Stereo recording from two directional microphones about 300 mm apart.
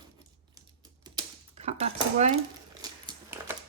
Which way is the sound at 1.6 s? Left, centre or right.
Right.